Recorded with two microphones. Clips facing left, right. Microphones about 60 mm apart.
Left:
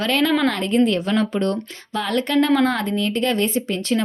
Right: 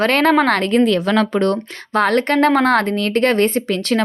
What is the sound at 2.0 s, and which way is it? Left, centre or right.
Speech, right.